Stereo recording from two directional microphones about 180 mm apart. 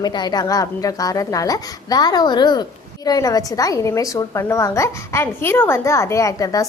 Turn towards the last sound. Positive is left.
turn(degrees=20)  # may be behind; listen again after turning